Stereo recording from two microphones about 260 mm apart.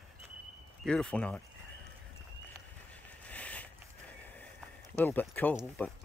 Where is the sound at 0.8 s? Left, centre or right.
Centre.